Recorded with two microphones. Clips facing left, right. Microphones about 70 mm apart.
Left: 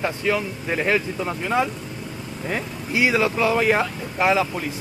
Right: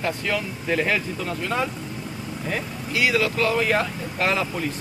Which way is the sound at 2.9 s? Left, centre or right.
Left.